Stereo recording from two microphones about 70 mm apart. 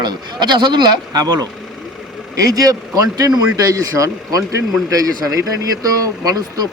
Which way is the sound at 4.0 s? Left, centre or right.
Right.